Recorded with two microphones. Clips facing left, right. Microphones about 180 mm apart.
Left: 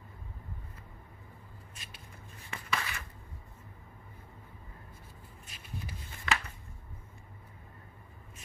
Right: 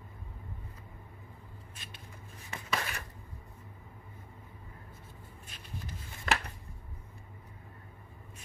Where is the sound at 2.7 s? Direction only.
45° right (ahead or behind).